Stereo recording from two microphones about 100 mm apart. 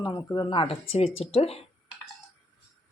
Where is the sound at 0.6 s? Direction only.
70° left (ahead or behind).